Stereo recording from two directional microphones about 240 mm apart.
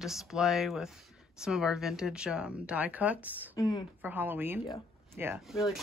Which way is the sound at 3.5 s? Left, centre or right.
Centre.